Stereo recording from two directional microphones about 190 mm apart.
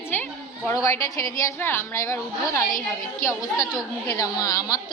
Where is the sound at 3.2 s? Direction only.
15° left (ahead or behind).